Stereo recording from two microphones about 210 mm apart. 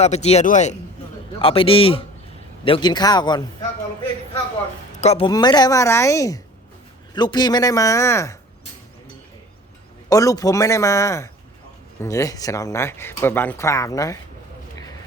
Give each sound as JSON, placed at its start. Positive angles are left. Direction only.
{"t": 0.0, "sound": "speech", "side_deg": 30}
{"t": 4.9, "sound": "speech", "side_deg": 30}
{"t": 10.1, "sound": "speech", "side_deg": 15}